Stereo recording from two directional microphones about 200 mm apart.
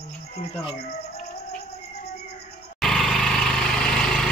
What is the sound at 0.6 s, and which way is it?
Speech, 25° left (ahead or behind).